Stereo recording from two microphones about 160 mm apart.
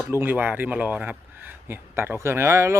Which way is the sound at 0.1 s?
15° right (ahead or behind).